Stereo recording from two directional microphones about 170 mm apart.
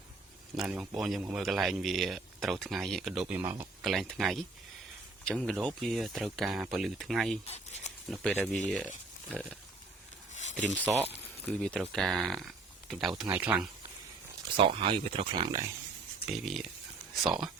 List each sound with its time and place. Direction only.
0.5 s a man's voice: 5° right (ahead or behind)
3.8 s a man's voice: centre (ahead or behind)
7.4 s speech: 40° left (ahead or behind)
8.1 s a man's voice: 5° left (ahead or behind)
10.6 s speech: 10° left (ahead or behind)
10.8 s speech: 10° right (ahead or behind)
11.5 s a man's voice: 5° left (ahead or behind)
14.5 s speech: 30° right (ahead or behind)
16.2 s a man's voice: centre (ahead or behind)